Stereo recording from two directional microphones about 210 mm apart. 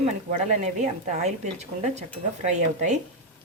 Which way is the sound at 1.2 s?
30° right (ahead or behind).